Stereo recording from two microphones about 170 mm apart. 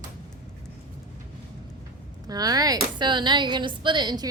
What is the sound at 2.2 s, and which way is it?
A woman's voice, 20° right (ahead or behind).